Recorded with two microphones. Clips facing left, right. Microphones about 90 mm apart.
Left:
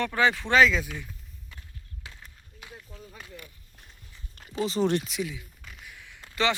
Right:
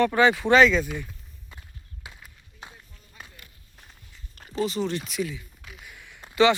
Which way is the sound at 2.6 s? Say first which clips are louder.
Right 1 dB; 30° right (ahead or behind).